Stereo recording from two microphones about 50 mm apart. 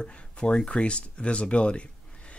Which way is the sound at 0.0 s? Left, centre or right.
Centre.